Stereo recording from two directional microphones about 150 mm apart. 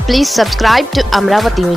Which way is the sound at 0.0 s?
Centre (ahead or behind).